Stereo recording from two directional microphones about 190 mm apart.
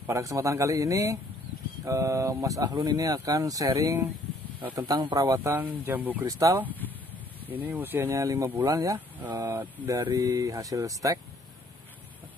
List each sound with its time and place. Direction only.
0.0 s speech: 15° right (ahead or behind)